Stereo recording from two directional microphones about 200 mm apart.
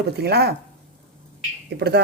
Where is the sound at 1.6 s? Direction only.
55° right (ahead or behind).